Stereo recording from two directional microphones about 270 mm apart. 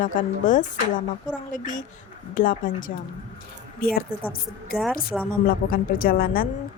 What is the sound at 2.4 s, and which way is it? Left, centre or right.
Speech, left.